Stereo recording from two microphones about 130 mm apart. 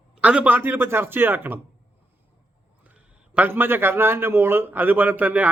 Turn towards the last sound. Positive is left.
turn(degrees=-10)  # may be behind; listen again after turning